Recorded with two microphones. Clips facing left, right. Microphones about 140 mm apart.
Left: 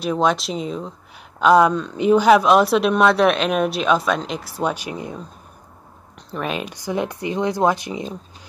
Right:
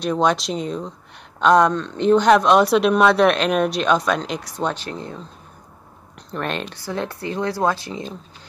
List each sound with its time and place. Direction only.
0.0 s speech: centre (ahead or behind)
6.3 s speech: 5° left (ahead or behind)